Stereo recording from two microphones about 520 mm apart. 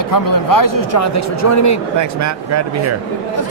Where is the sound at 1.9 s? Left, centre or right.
Right.